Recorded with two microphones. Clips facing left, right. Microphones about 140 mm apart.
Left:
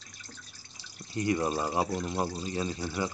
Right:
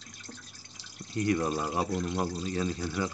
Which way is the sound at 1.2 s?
15° left (ahead or behind).